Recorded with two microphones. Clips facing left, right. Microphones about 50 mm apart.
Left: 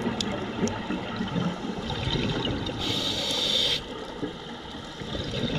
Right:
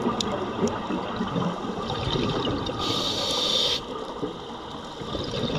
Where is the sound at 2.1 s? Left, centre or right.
Centre.